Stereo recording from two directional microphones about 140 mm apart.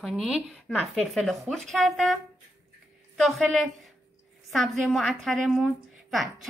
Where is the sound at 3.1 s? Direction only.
Centre (ahead or behind).